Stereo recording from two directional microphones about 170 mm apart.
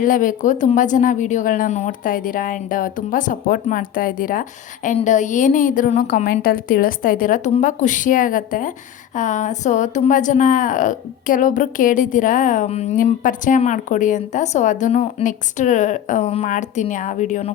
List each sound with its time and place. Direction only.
0.0 s a woman's voice: 50° left (ahead or behind)